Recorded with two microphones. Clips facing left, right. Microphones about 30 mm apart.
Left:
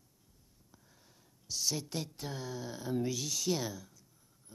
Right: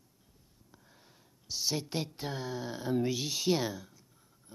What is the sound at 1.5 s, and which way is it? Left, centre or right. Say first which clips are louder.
Speech: right 2 dB; right.